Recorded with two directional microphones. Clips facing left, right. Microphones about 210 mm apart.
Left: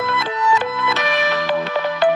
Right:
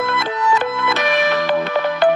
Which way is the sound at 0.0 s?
50° right (ahead or behind).